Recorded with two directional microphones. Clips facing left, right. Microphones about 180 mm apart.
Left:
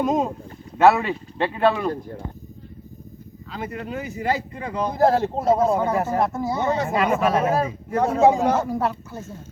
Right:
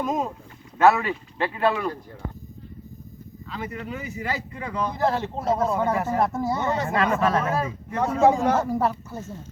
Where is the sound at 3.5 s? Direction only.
45° left (ahead or behind).